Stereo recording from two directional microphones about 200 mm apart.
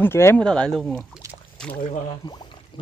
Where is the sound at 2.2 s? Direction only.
20° left (ahead or behind).